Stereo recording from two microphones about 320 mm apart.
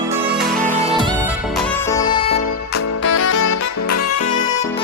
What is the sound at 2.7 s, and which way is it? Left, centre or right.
Music, left.